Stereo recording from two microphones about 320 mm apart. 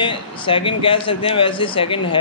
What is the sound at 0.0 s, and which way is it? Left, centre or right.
A man's voice, centre.